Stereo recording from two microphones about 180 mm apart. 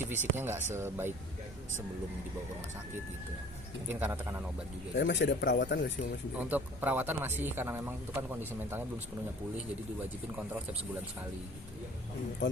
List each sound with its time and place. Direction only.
0.0 s speech: 10° right (ahead or behind)
3.8 s speech: 10° right (ahead or behind)
4.9 s speech: 85° left
6.3 s speech: 10° right (ahead or behind)
12.4 s a man's voice: 90° left